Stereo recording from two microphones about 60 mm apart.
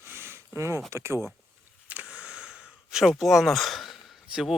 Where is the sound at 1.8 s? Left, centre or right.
Right; by 3.1 s centre.